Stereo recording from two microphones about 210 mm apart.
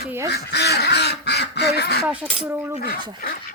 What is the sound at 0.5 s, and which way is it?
Quack, 50° left (ahead or behind).